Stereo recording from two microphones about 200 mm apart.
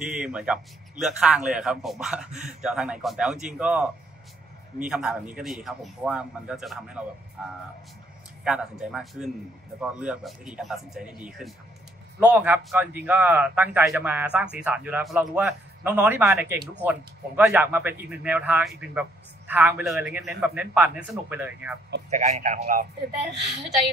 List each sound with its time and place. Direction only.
0.0 s a man's voice: 5° right (ahead or behind)
8.5 s a man's voice: 5° right (ahead or behind)
22.1 s speech: 40° right (ahead or behind)